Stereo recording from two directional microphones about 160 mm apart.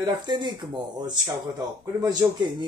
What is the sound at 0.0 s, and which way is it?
Speech, 30° right (ahead or behind).